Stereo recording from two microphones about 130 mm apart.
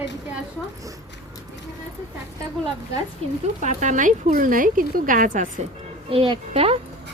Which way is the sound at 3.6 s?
70° right (ahead or behind).